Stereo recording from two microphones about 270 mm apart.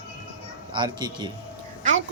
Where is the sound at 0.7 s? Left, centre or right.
Centre.